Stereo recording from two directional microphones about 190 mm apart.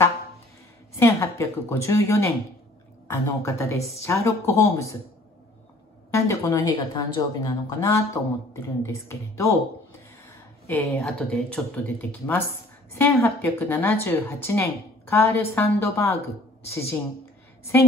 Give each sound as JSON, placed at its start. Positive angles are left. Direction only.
{"t": 0.9, "sound": "a woman's voice", "side_deg": 15}
{"t": 6.1, "sound": "a woman's voice", "side_deg": 15}
{"t": 10.7, "sound": "a woman's voice", "side_deg": 15}
{"t": 11.1, "sound": "a woman's voice", "side_deg": 0}
{"t": 17.7, "sound": "a woman's voice", "side_deg": 10}